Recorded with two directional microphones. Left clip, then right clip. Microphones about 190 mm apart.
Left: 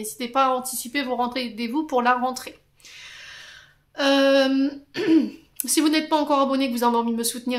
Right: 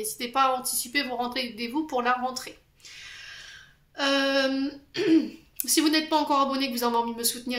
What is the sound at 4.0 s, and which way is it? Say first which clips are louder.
Speech: left 6 dB; 45° left (ahead or behind).